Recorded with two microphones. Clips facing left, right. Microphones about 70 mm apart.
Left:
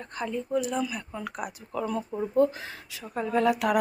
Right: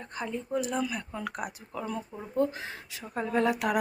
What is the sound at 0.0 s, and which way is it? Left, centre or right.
Speech, centre.